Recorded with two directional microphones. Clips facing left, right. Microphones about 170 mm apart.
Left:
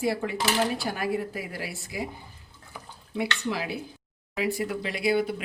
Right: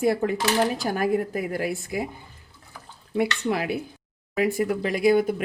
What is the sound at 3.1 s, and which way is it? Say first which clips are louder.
Speech: right 5 dB; 55° right (ahead or behind).